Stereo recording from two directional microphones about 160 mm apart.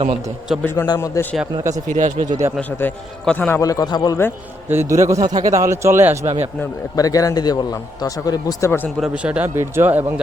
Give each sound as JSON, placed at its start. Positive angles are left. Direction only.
{"t": 0.6, "sound": "a man's voice", "side_deg": 15}
{"t": 1.5, "sound": "a man's voice", "side_deg": -20}
{"t": 1.9, "sound": "speech", "side_deg": -50}
{"t": 2.6, "sound": "a man's voice", "side_deg": 10}
{"t": 3.6, "sound": "a man's voice", "side_deg": 20}
{"t": 4.7, "sound": "a man's voice", "side_deg": -15}
{"t": 6.2, "sound": "speech", "side_deg": -40}
{"t": 6.9, "sound": "a man's voice", "side_deg": 20}
{"t": 9.0, "sound": "a man's voice", "side_deg": -5}